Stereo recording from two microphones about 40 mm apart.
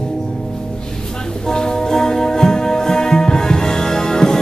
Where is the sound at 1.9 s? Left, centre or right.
Centre.